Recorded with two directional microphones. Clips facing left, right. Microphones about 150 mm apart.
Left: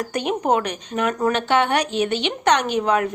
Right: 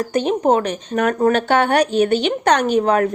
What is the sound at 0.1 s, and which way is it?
Speech, 30° right (ahead or behind).